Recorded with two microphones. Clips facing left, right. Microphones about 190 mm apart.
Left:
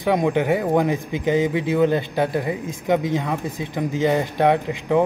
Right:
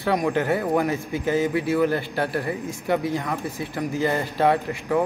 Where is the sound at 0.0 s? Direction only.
20° left (ahead or behind).